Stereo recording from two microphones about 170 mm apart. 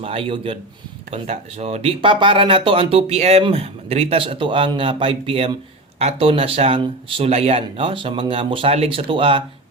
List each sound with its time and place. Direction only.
0.0 s speech: 35° right (ahead or behind)